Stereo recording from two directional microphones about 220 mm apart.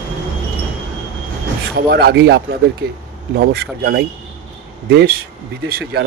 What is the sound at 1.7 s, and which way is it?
Speech, 45° right (ahead or behind).